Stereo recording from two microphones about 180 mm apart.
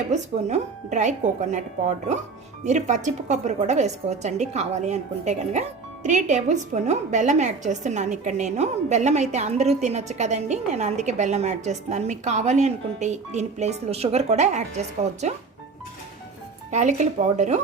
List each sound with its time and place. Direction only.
0.1 s a woman's voice: 40° right (ahead or behind)
2.6 s a woman's voice: 40° right (ahead or behind)
16.7 s a woman's voice: 40° right (ahead or behind)